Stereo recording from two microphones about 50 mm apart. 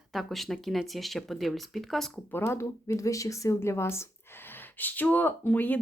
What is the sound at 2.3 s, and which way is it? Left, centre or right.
Speech, left.